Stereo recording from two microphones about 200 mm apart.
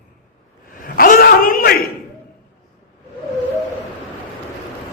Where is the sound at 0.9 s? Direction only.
45° left (ahead or behind).